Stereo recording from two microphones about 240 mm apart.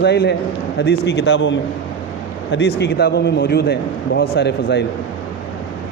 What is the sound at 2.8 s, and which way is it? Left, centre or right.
Speech, left.